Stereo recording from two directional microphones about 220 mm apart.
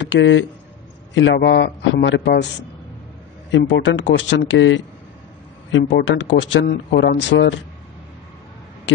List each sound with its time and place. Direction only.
0.0 s speech: 55° left (ahead or behind)
3.5 s speech: 55° left (ahead or behind)